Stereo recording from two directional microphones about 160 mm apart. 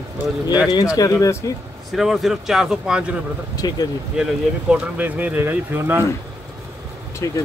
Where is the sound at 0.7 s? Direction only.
25° left (ahead or behind).